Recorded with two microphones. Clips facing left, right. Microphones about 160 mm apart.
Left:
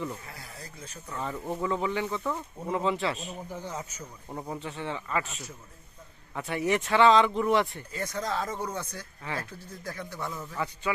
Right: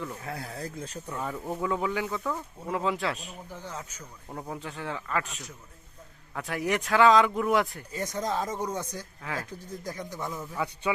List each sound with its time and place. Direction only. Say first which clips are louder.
0.3 s speech: right 9 dB; 55° right (ahead or behind)
1.1 s speech: left 1 dB; 5° right (ahead or behind)
3.5 s speech: even; 10° left (ahead or behind)
6.3 s speech: left 1 dB; centre (ahead or behind)
7.9 s speech: right 2 dB; 15° right (ahead or behind)